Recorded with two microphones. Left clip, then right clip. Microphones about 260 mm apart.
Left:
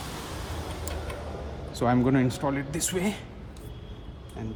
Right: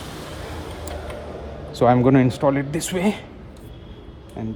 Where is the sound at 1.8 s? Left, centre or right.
Right.